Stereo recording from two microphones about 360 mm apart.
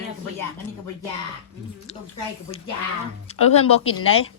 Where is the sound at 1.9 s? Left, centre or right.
Centre.